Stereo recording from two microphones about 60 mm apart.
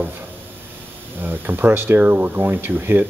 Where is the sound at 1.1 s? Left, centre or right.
Right.